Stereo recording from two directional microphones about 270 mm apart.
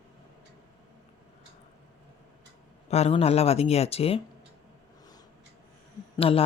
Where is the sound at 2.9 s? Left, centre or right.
Left.